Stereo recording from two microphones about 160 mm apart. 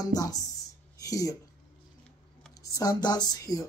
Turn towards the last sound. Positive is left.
turn(degrees=20)  # may be behind; listen again after turning